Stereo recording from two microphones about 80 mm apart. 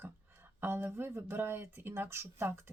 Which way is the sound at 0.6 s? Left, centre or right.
Right.